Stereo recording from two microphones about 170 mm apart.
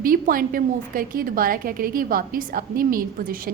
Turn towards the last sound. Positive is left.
turn(degrees=-55)  # may be behind; listen again after turning